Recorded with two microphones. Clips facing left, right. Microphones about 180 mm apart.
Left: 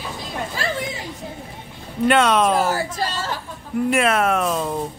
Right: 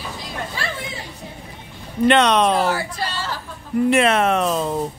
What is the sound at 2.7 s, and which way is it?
Speech, 45° left (ahead or behind).